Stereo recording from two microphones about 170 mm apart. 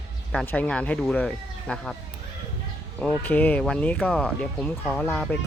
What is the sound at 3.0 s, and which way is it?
Speech, 10° left (ahead or behind).